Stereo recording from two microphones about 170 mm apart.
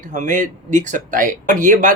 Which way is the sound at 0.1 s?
50° right (ahead or behind).